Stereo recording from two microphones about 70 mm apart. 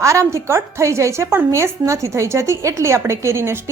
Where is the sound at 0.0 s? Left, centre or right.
Right.